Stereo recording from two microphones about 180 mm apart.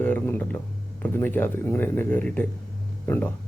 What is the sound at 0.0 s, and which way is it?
Speech, 10° left (ahead or behind).